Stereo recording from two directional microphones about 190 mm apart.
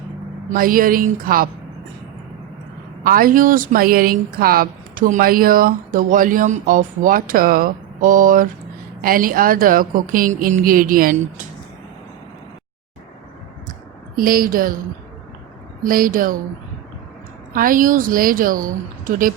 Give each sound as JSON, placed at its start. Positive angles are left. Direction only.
{"t": 0.5, "sound": "speech", "side_deg": -50}
{"t": 3.0, "sound": "speech", "side_deg": -50}
{"t": 14.2, "sound": "speech", "side_deg": -50}
{"t": 15.8, "sound": "speech", "side_deg": -45}
{"t": 17.5, "sound": "speech", "side_deg": -45}